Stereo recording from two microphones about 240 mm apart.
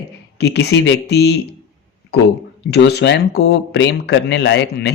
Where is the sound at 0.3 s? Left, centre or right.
Left.